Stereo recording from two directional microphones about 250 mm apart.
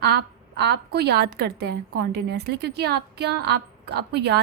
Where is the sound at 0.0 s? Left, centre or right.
Right.